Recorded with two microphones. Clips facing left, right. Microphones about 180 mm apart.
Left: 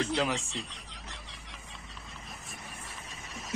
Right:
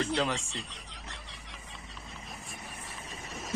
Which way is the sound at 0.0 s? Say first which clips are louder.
Even; centre (ahead or behind).